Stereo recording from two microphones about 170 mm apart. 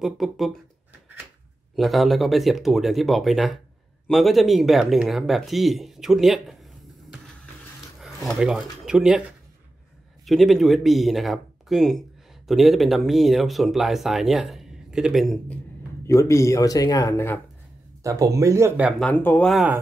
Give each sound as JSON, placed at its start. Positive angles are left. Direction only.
{"t": 0.0, "sound": "speech", "side_deg": 0}
{"t": 1.8, "sound": "speech", "side_deg": 0}
{"t": 10.2, "sound": "speech", "side_deg": 0}
{"t": 16.1, "sound": "speech", "side_deg": 15}
{"t": 18.0, "sound": "speech", "side_deg": -20}
{"t": 18.9, "sound": "speech", "side_deg": 10}